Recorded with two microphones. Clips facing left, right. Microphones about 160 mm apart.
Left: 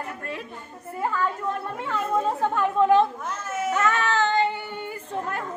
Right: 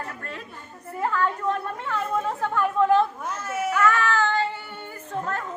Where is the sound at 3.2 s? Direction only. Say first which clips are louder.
Right 1 dB; 10° right (ahead or behind).